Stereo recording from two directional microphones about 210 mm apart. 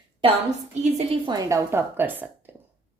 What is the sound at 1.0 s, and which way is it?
A woman's voice, 20° right (ahead or behind).